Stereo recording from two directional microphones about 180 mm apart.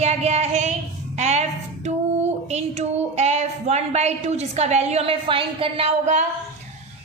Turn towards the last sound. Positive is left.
turn(degrees=-35)  # may be behind; listen again after turning